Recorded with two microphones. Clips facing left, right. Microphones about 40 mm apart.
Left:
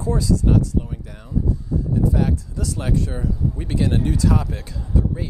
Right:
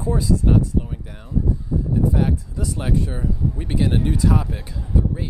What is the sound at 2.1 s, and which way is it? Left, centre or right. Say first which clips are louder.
Speech: even; centre.